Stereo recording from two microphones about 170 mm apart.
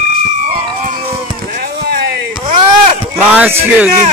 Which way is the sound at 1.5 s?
70° right (ahead or behind).